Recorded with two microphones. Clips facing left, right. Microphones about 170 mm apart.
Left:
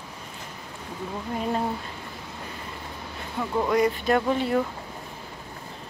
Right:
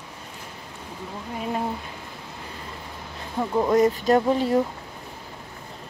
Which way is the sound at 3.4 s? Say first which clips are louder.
Right 3 dB; 35° right (ahead or behind).